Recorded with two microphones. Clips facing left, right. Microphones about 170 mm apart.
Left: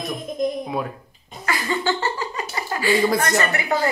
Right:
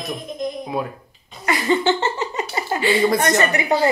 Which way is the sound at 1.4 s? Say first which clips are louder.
Right 5 dB; 20° right (ahead or behind).